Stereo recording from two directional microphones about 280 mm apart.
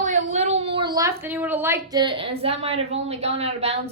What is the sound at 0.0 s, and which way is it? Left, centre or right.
A woman's voice, right.